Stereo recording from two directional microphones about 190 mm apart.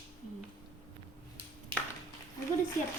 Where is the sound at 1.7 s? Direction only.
30° right (ahead or behind).